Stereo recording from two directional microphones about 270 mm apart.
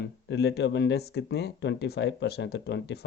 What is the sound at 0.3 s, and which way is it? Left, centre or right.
Speech, left.